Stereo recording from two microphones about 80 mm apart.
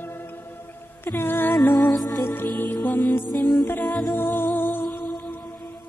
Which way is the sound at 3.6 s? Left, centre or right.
Left.